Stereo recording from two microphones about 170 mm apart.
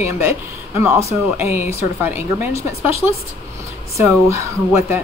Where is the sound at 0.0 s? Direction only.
15° right (ahead or behind).